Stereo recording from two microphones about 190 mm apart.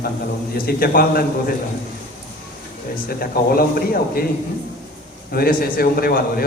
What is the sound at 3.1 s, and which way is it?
A man's voice, 50° left (ahead or behind).